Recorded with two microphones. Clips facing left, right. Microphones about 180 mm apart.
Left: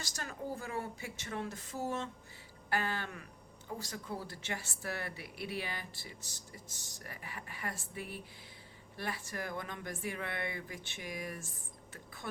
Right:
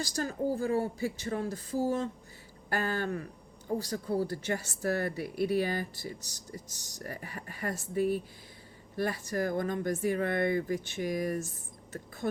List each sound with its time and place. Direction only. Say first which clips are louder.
0.0 s speech: right 11 dB; 35° right (ahead or behind)
2.6 s speech: right 5 dB; 45° right (ahead or behind)